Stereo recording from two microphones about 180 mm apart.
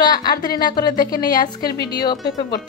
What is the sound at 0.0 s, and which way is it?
Speech, 25° left (ahead or behind).